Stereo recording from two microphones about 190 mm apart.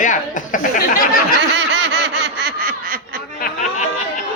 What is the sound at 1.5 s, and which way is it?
Laughter, 65° right (ahead or behind).